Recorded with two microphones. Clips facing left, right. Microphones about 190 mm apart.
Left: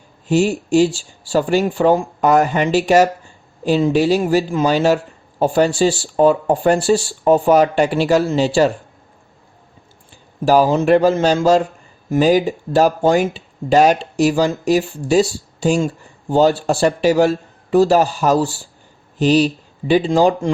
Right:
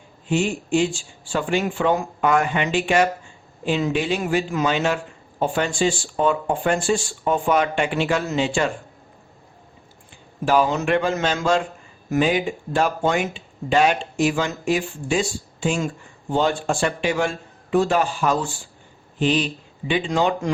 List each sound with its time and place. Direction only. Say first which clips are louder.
0.3 s speech: left 6 dB; 40° left (ahead or behind)
10.4 s speech: left 6 dB; 40° left (ahead or behind)